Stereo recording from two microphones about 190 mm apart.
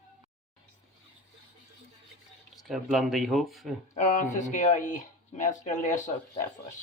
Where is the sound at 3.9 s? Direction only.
40° left (ahead or behind).